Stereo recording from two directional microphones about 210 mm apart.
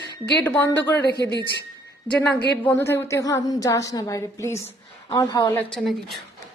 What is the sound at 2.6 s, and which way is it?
A woman's voice, 10° left (ahead or behind).